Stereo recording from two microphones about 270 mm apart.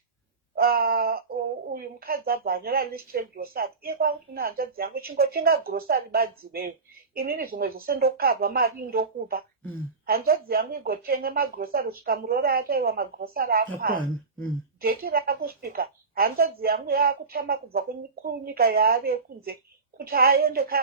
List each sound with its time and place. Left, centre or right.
0.5 s speech: right